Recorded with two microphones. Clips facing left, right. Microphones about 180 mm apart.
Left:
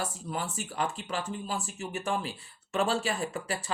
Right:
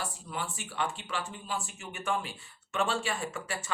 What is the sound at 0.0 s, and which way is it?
Speech, 40° left (ahead or behind).